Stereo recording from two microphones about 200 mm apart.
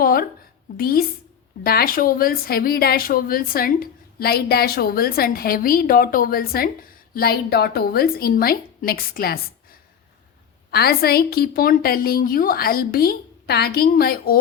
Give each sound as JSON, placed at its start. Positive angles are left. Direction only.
{"t": 0.0, "sound": "a woman's voice", "side_deg": 45}
{"t": 10.7, "sound": "a woman's voice", "side_deg": 50}